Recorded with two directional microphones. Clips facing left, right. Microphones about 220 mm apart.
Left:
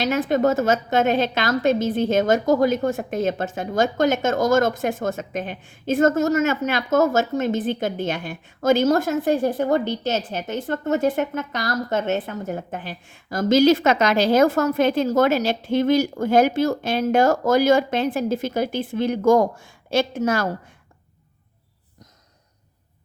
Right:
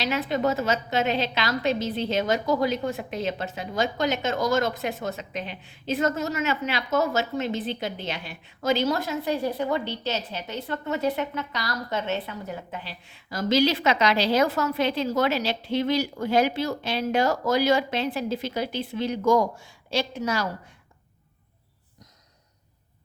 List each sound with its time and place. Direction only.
0.0 s a woman's voice: 50° left (ahead or behind)